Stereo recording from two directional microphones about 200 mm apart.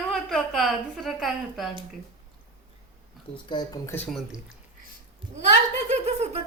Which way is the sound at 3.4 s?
20° left (ahead or behind).